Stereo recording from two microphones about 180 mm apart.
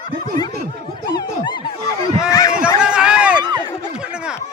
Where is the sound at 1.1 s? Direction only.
25° left (ahead or behind).